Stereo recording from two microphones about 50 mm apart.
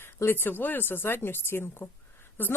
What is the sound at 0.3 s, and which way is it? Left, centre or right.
Speech, left.